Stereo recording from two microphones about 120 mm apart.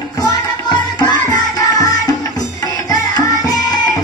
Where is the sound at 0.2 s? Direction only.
40° left (ahead or behind).